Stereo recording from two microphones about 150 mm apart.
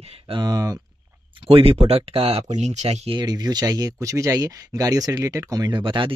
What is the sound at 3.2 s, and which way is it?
Speech, 25° right (ahead or behind).